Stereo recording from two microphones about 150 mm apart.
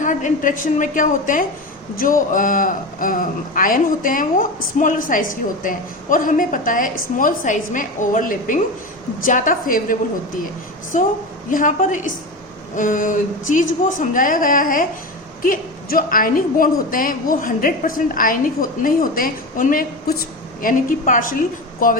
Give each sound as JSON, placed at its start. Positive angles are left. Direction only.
{"t": 0.0, "sound": "a man's voice", "side_deg": 55}